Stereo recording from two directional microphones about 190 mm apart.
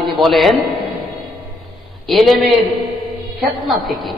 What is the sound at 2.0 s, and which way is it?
Speech, centre (ahead or behind).